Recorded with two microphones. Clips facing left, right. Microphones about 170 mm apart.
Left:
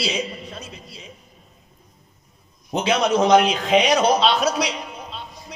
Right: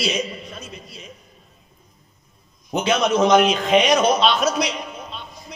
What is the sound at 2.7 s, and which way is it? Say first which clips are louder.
A man's voice: even; 30° left (ahead or behind).